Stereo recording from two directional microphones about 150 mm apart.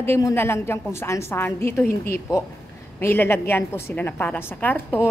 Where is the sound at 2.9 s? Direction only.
15° left (ahead or behind).